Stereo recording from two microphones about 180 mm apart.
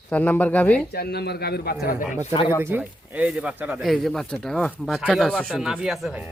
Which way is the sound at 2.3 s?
25° left (ahead or behind).